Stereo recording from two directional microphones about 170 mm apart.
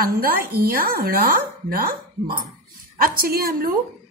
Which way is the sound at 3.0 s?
60° right (ahead or behind).